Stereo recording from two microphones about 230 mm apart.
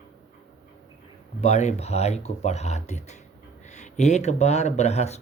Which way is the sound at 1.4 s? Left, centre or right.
Left.